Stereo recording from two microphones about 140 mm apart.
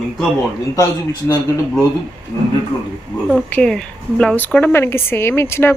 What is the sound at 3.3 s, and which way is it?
Speech, 5° left (ahead or behind).